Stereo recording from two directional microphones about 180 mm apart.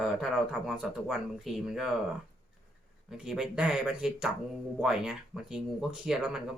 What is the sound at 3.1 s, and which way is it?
Speech, centre (ahead or behind).